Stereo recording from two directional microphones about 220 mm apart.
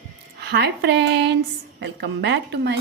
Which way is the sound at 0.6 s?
50° right (ahead or behind).